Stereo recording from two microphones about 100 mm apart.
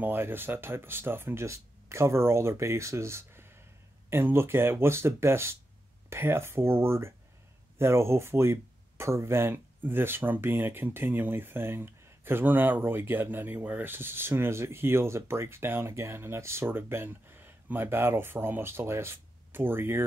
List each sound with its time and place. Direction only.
0.0 s speech: 20° right (ahead or behind)